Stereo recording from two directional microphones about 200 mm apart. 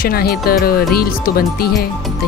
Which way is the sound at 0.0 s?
50° left (ahead or behind).